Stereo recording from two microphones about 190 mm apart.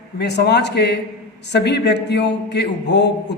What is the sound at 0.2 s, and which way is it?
A man's voice, 60° left (ahead or behind).